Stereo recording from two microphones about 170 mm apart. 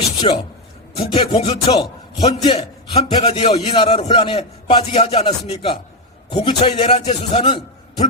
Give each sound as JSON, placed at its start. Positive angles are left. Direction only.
{"t": 0.2, "sound": "a man's voice", "side_deg": 35}